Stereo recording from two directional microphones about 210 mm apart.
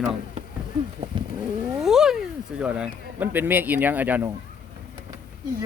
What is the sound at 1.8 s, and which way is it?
Speech, centre (ahead or behind).